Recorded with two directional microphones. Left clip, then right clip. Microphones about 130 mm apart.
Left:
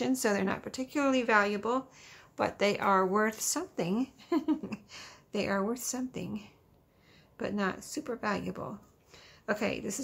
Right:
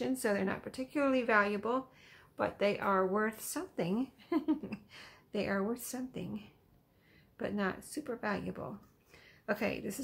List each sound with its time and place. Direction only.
0.0 s a woman's voice: 35° left (ahead or behind)